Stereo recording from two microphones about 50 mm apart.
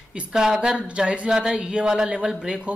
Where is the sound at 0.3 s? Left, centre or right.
Centre.